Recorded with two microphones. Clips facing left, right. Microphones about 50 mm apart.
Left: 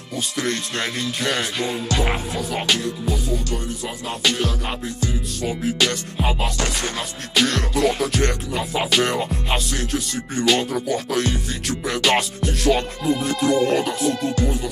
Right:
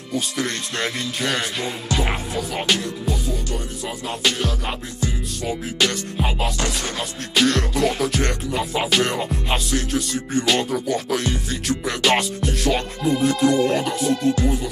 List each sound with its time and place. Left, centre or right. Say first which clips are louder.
0.1 s music: even; centre